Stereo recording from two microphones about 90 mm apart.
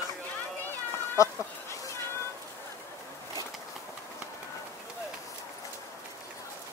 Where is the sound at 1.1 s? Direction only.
40° left (ahead or behind).